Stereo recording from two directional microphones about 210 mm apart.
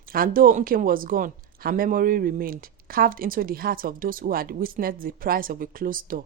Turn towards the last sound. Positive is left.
turn(degrees=-40)  # may be behind; listen again after turning